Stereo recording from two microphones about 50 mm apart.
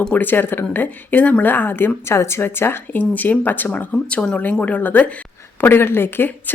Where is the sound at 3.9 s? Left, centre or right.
Left.